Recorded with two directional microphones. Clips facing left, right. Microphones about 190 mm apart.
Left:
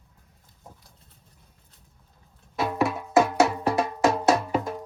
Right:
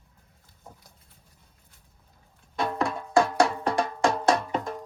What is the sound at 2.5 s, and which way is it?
Music, 5° left (ahead or behind).